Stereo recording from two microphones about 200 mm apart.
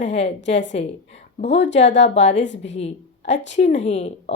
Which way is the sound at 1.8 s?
65° left (ahead or behind).